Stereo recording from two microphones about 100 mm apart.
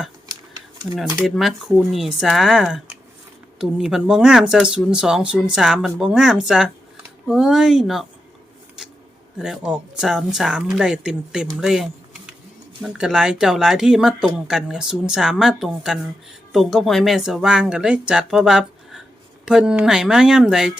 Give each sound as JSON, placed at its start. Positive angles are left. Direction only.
{"t": 1.2, "sound": "speech", "side_deg": 0}
{"t": 9.4, "sound": "speech", "side_deg": -5}